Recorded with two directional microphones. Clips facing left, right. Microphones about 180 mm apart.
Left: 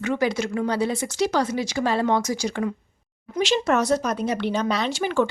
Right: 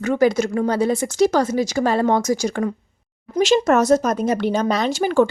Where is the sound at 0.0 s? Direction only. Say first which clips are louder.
Right 6 dB; 45° right (ahead or behind).